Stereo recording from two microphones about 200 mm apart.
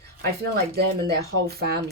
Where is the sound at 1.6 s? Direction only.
50° right (ahead or behind).